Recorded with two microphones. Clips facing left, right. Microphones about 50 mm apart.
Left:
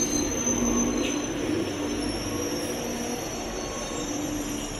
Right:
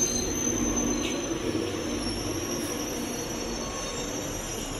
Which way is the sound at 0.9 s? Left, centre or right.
Left.